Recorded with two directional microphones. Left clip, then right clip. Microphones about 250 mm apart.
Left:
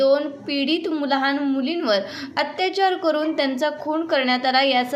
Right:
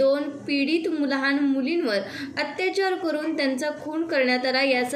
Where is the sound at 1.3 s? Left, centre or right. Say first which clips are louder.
Left 1 dB; left.